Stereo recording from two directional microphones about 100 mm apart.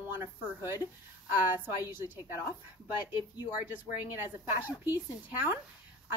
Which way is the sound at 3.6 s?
15° right (ahead or behind).